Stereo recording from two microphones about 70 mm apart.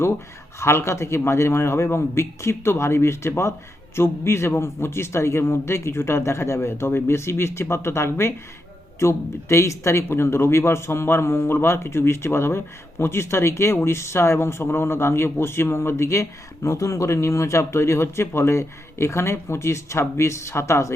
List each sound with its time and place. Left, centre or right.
0.6 s speech: left